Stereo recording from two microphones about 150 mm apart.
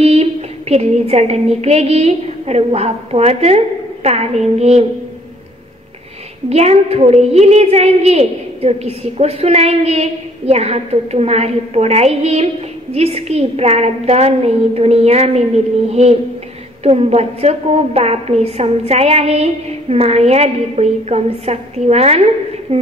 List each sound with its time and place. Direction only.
0.0 s a woman's voice: 45° right (ahead or behind)
6.5 s a woman's voice: 45° right (ahead or behind)